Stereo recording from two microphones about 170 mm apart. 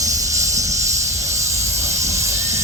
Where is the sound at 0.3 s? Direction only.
20° right (ahead or behind).